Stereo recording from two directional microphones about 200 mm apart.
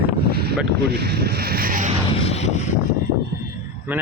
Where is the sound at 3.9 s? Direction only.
10° right (ahead or behind).